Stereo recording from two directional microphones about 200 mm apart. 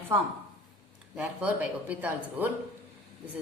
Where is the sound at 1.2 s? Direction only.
5° right (ahead or behind).